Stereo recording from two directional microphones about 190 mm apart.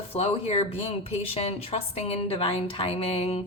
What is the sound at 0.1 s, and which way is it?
A woman's voice, 35° left (ahead or behind).